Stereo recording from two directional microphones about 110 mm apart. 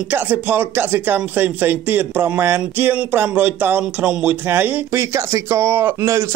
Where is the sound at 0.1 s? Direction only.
20° right (ahead or behind).